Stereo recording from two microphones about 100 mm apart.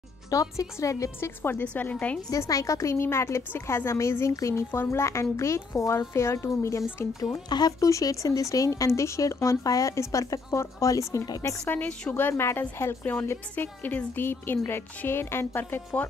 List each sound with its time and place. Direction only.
0.3 s a woman's voice: 35° left (ahead or behind); by 2.1 s 15° left (ahead or behind)
2.3 s a woman's voice: 35° left (ahead or behind)
7.4 s speech: 45° left (ahead or behind)
11.7 s a woman's voice: 15° left (ahead or behind)